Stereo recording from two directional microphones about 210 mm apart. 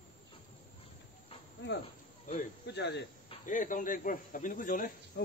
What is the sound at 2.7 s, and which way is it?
Speech, 55° left (ahead or behind).